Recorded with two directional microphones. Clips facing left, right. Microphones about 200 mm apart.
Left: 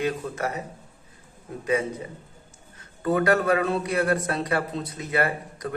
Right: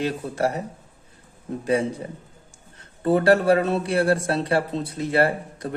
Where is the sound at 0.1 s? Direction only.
35° right (ahead or behind).